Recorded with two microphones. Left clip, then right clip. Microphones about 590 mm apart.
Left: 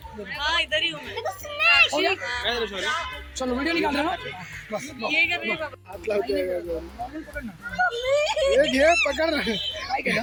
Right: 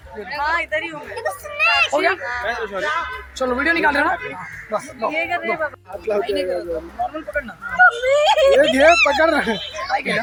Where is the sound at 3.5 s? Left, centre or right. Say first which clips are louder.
Right 7 dB; left.